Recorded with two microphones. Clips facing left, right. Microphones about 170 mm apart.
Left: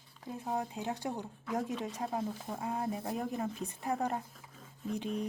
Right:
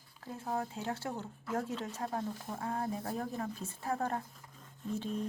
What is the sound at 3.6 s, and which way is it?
Speech, 15° left (ahead or behind).